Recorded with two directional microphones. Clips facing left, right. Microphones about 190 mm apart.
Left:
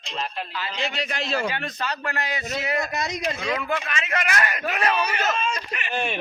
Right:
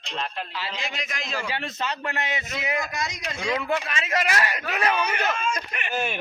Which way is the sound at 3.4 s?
25° right (ahead or behind).